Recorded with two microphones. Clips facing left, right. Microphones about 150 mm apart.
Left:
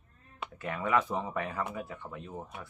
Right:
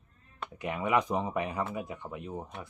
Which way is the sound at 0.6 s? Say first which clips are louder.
Right 1 dB; 15° right (ahead or behind).